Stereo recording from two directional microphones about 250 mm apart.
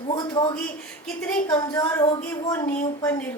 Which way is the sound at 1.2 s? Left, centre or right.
Centre.